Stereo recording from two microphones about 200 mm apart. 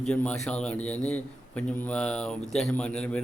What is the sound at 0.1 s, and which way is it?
A man's voice, 5° left (ahead or behind).